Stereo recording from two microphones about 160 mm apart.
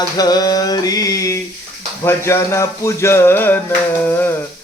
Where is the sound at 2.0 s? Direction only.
15° left (ahead or behind).